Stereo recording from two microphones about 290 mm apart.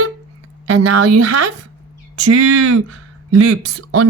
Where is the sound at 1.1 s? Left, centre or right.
Right.